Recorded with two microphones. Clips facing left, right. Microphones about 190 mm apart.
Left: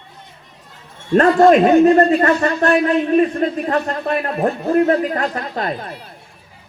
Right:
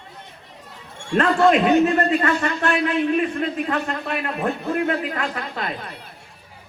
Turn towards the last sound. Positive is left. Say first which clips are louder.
# left 6 dB
turn(degrees=40)  # may be behind; listen again after turning